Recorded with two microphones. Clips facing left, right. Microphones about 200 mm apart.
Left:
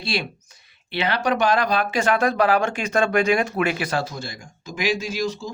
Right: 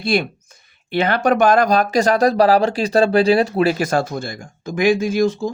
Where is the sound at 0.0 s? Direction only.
50° right (ahead or behind).